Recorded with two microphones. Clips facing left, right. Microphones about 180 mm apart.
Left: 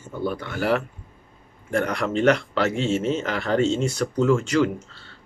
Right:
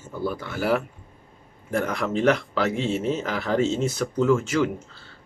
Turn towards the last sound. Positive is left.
turn(degrees=0)  # may be behind; listen again after turning